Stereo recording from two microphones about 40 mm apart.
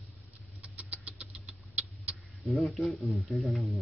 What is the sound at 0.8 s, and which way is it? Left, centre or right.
Rodents, right.